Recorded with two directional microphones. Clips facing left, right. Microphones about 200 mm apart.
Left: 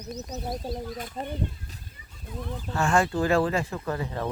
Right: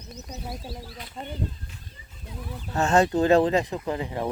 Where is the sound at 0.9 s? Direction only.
50° left (ahead or behind).